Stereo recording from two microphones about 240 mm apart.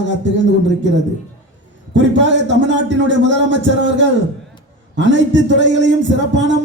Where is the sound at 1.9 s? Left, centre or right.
Right.